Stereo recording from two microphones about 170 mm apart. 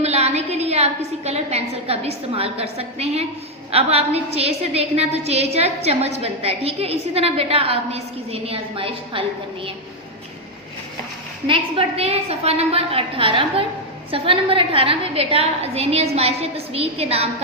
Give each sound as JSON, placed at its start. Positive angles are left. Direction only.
{"t": 0.0, "sound": "a woman's voice", "side_deg": -40}
{"t": 11.4, "sound": "a woman's voice", "side_deg": -30}